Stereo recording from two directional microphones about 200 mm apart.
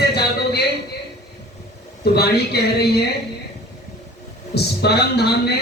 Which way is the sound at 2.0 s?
55° left (ahead or behind).